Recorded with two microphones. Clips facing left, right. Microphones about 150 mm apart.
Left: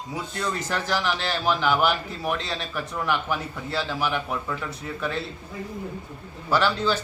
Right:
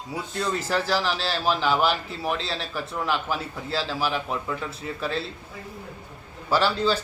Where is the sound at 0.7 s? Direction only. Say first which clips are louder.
Right 2 dB; 30° right (ahead or behind).